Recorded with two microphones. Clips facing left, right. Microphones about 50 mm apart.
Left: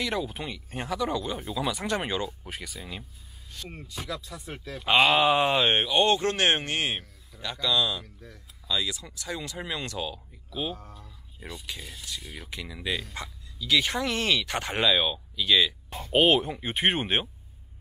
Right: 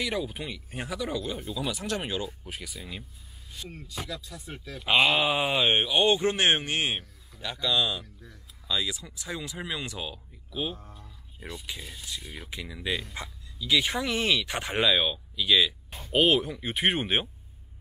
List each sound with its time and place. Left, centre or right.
0.0 s speech: centre
4.3 s speech: centre
4.8 s speech: centre
10.8 s speech: right
11.6 s speech: centre
15.9 s speech: left